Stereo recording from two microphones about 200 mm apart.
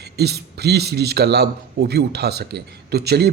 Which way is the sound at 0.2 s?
55° right (ahead or behind).